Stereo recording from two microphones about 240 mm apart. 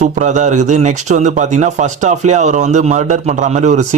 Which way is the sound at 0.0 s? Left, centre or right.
Right.